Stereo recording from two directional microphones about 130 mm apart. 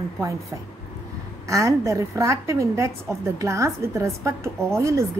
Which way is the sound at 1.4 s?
25° right (ahead or behind).